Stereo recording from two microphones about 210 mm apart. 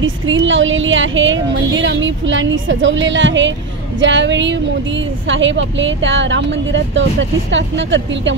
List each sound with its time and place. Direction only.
0.0 s speech: 65° right (ahead or behind)